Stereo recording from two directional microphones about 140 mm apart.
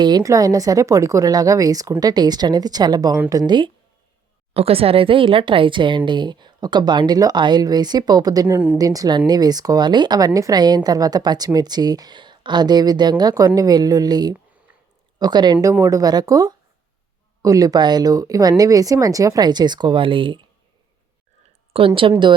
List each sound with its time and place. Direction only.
0.0 s speech: 30° right (ahead or behind)
4.5 s speech: 45° right (ahead or behind)
21.7 s speech: 40° right (ahead or behind)